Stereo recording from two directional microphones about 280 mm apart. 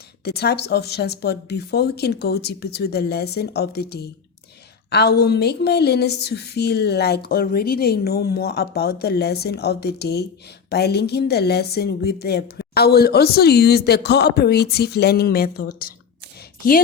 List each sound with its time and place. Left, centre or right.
0.3 s speech: left